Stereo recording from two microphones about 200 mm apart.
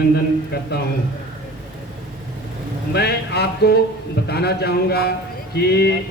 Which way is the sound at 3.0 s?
55° left (ahead or behind).